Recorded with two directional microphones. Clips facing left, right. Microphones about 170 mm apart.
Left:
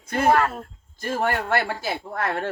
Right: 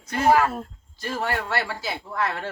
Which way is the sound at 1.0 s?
50° left (ahead or behind).